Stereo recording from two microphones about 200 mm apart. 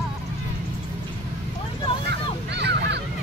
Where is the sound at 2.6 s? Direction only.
60° right (ahead or behind).